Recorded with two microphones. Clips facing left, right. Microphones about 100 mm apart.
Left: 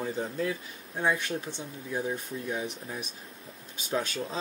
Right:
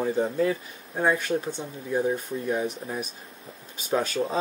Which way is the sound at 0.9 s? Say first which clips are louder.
Right 5 dB; 40° right (ahead or behind).